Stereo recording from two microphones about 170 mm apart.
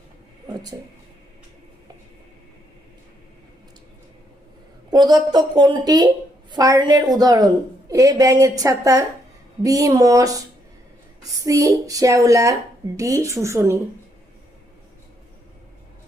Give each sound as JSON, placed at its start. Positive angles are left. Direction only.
{"t": 0.4, "sound": "a sound", "side_deg": -20}
{"t": 4.9, "sound": "a woman's voice", "side_deg": -25}
{"t": 11.4, "sound": "a woman's voice", "side_deg": -20}